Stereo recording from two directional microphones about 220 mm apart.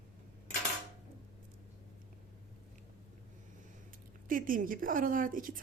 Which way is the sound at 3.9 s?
40° right (ahead or behind).